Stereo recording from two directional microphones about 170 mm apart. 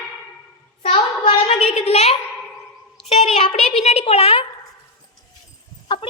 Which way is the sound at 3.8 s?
40° left (ahead or behind).